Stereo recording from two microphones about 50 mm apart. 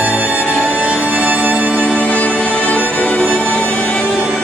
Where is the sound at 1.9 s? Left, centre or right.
Left.